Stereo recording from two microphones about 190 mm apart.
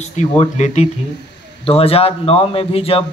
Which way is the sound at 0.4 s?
40° left (ahead or behind).